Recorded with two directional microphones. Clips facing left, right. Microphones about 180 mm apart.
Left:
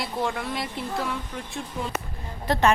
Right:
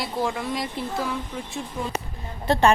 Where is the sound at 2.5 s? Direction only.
25° right (ahead or behind).